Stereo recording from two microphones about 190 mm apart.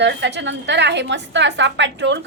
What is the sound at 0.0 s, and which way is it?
A woman's voice, 65° right (ahead or behind).